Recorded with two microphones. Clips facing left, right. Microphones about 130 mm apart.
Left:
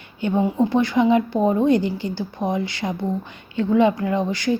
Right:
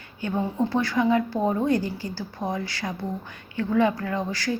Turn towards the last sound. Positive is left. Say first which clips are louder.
# left 6 dB
turn(degrees=20)  # may be behind; listen again after turning